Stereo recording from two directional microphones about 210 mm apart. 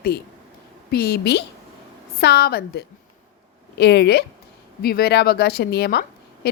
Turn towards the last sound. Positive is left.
turn(degrees=50)  # may be behind; listen again after turning